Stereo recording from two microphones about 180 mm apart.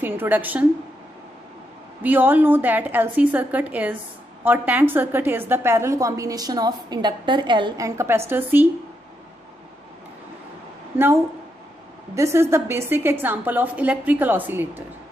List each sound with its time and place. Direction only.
0.0 s a woman's voice: 10° right (ahead or behind)
2.0 s a woman's voice: 10° right (ahead or behind)
12.2 s a woman's voice: 15° right (ahead or behind)